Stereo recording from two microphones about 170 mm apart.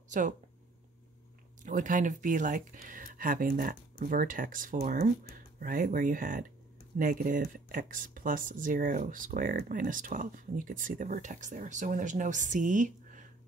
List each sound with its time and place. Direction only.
1.6 s speech: 50° right (ahead or behind)